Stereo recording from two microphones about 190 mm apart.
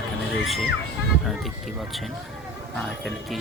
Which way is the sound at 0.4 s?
Centre (ahead or behind).